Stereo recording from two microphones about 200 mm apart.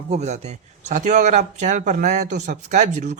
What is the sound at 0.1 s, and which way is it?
A man's voice, 35° right (ahead or behind).